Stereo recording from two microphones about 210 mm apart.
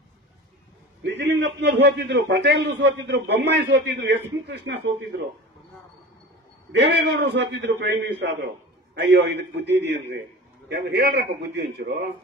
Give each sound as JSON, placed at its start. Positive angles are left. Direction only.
{"t": 1.0, "sound": "a man's voice", "side_deg": -55}
{"t": 6.8, "sound": "a man's voice", "side_deg": -55}